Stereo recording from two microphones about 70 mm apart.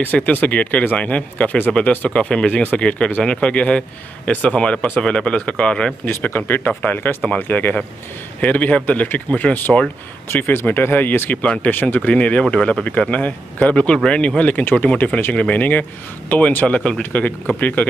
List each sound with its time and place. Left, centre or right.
0.0 s speech: left
6.0 s speech: left